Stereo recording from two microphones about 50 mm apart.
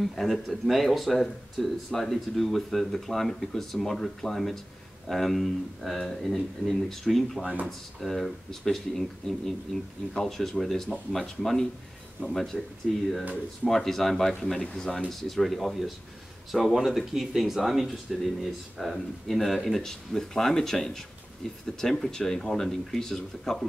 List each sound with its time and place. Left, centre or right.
0.0 s speech: centre
9.2 s speech: centre
10.1 s speech: centre
12.5 s speech: centre
13.7 s speech: centre